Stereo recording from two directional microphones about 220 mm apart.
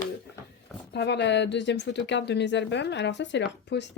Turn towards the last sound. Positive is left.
turn(degrees=50)  # may be behind; listen again after turning